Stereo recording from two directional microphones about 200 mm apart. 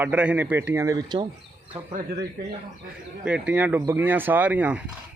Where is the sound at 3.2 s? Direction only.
5° right (ahead or behind).